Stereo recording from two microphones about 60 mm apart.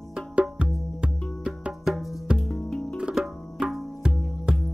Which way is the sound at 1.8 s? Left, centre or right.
Centre.